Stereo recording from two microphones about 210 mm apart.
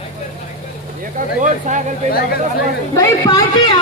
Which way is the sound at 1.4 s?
35° right (ahead or behind).